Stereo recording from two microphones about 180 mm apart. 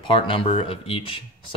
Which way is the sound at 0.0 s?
30° left (ahead or behind).